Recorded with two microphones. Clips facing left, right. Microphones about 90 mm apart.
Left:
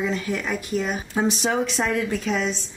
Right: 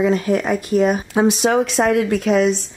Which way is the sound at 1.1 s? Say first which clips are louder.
Right 7 dB; 75° right (ahead or behind).